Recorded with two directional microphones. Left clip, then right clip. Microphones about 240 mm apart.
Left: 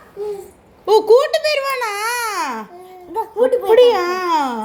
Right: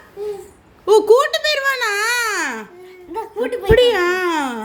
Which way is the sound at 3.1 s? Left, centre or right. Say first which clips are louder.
Left 6 dB; right.